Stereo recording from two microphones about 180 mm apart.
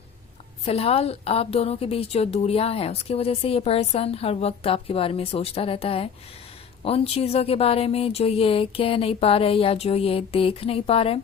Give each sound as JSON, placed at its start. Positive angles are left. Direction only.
{"t": 0.6, "sound": "a woman's voice", "side_deg": 35}